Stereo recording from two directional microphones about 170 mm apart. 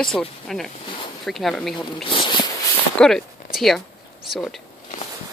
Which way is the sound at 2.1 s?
30° left (ahead or behind).